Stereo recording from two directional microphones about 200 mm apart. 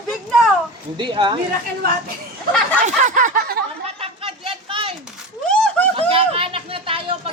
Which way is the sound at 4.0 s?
25° right (ahead or behind).